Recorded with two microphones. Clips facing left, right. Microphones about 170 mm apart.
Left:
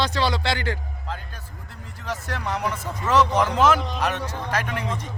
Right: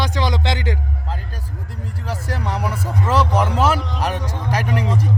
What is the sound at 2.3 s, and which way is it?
Speech, 35° right (ahead or behind).